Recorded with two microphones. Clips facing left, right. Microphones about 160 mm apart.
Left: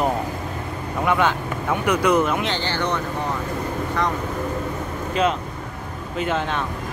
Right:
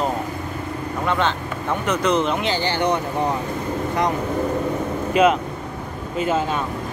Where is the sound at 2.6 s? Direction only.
15° right (ahead or behind).